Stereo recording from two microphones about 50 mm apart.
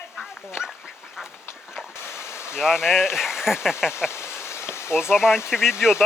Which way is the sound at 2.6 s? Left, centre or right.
Centre.